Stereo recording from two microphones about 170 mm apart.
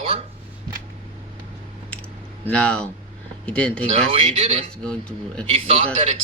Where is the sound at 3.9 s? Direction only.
35° right (ahead or behind).